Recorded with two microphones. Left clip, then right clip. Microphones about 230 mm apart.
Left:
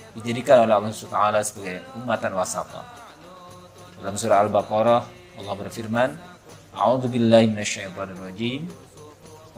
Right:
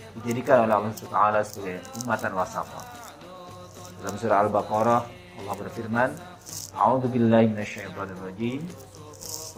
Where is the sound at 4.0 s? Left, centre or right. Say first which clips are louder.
Left 3 dB; left.